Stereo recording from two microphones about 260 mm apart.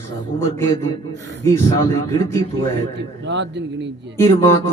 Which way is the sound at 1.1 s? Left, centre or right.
Right.